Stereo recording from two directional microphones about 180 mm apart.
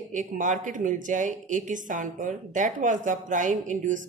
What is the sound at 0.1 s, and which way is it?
Speech, 45° right (ahead or behind).